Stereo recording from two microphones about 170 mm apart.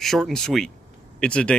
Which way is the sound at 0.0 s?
Centre (ahead or behind).